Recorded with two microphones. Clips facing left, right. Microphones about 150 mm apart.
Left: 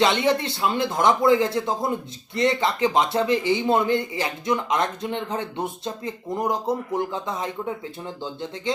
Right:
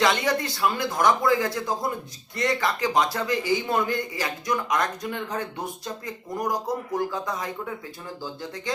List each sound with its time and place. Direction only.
0.0 s speech: 25° left (ahead or behind)